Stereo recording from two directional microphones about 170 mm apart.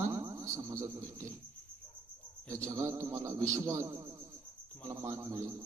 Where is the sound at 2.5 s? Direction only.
15° right (ahead or behind).